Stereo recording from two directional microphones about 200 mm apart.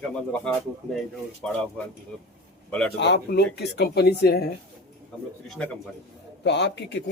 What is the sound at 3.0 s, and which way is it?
Speech, 60° left (ahead or behind).